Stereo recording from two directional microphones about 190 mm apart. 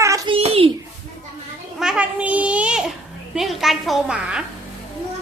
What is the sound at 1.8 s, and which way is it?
A child's voice, 5° right (ahead or behind).